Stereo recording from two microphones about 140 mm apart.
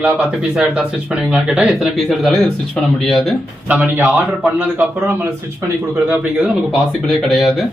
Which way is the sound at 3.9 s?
15° right (ahead or behind).